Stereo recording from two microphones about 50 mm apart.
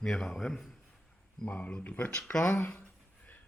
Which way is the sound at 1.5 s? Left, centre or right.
Left.